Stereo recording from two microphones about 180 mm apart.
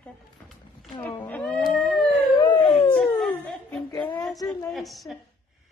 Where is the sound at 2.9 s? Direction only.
5° left (ahead or behind).